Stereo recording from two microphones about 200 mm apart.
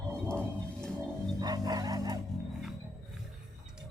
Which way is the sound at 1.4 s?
20° right (ahead or behind).